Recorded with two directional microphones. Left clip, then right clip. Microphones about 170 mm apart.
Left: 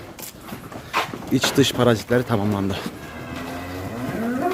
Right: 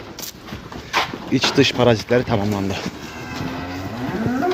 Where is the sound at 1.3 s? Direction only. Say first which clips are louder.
Right 2 dB; 20° left (ahead or behind).